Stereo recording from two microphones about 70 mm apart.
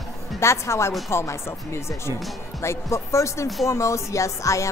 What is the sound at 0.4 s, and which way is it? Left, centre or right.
Speech, left.